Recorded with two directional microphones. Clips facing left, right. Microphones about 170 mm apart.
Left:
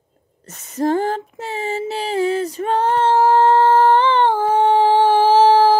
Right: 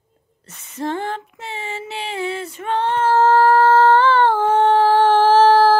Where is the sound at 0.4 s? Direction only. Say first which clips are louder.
Left 6 dB; 40° left (ahead or behind).